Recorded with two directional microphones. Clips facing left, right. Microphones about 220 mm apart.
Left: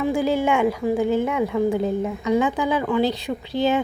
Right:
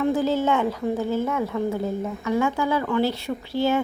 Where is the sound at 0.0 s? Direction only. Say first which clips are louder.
Left 1 dB; 10° left (ahead or behind).